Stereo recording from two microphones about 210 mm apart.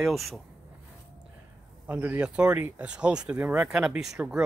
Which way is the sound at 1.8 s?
5° right (ahead or behind).